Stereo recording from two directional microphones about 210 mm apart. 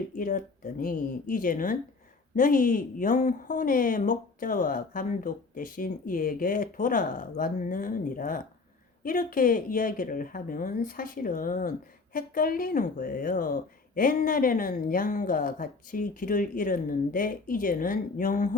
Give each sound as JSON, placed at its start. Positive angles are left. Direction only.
{"t": 0.1, "sound": "speech", "side_deg": 40}